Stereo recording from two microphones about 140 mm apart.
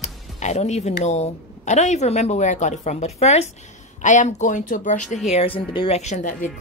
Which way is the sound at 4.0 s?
60° left (ahead or behind).